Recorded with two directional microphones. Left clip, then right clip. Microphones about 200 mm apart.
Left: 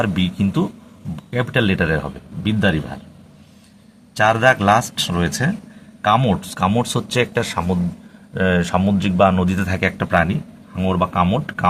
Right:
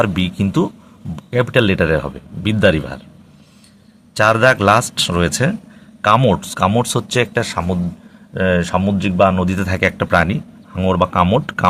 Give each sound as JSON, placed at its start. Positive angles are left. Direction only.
{"t": 0.0, "sound": "speech", "side_deg": -30}
{"t": 4.1, "sound": "speech", "side_deg": -30}